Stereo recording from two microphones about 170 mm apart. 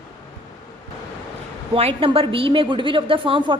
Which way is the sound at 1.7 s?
35° right (ahead or behind).